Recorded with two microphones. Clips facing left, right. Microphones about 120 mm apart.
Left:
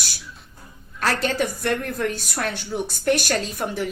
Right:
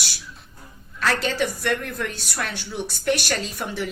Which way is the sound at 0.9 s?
45° left (ahead or behind).